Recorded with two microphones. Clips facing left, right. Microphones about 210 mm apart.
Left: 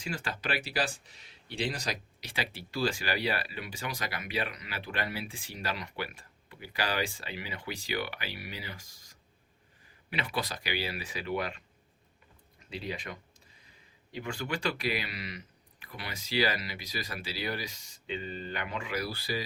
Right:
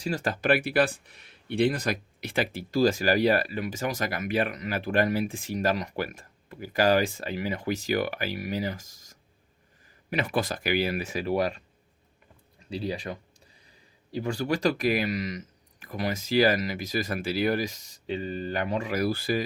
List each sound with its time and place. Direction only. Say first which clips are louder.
0.0 s speech: right 8 dB; 40° right (ahead or behind)